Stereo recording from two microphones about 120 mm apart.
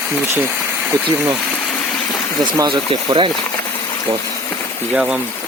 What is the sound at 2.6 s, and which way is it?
Speech, 45° right (ahead or behind).